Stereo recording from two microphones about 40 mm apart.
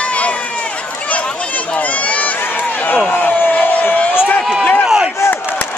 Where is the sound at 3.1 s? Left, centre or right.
Left.